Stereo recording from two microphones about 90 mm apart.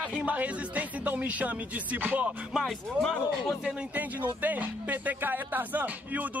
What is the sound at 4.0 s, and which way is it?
Speech, 20° right (ahead or behind).